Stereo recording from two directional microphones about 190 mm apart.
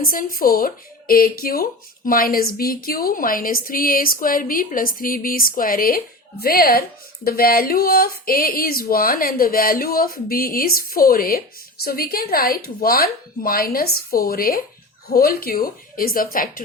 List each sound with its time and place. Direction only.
0.0 s speech: 50° left (ahead or behind)